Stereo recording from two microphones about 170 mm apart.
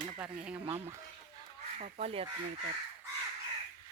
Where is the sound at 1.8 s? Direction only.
35° right (ahead or behind).